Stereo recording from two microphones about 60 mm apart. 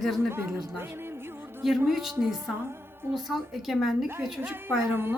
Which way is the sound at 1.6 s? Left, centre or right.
Centre.